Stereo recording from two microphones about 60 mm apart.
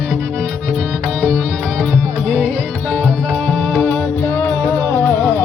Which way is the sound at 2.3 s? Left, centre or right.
Left.